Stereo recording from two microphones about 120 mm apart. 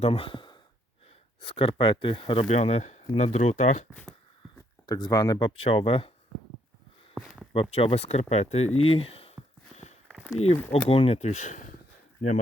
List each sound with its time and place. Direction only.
0.0 s speech: 50° left (ahead or behind)
2.5 s speech: 65° left (ahead or behind)
4.9 s speech: 35° left (ahead or behind)
5.7 s speech: 50° left (ahead or behind)
7.1 s a sound: centre (ahead or behind)
7.5 s speech: 50° left (ahead or behind)
9.7 s walk: 70° left (ahead or behind)
10.1 s walk: centre (ahead or behind)
10.3 s speech: 60° left (ahead or behind); by 11.7 s 90° left
12.2 s speech: 75° left (ahead or behind)